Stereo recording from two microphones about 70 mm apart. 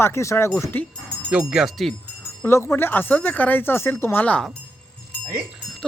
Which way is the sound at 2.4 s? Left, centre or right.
Left.